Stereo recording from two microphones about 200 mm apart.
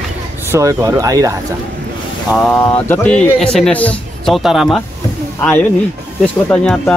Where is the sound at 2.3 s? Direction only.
5° left (ahead or behind).